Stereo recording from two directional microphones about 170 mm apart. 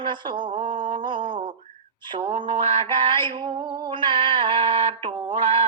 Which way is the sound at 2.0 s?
25° right (ahead or behind).